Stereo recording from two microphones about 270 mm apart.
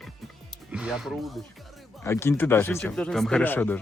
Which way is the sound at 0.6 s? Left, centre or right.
Centre.